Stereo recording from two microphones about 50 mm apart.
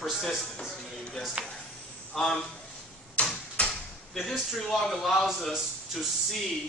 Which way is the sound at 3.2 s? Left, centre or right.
Left.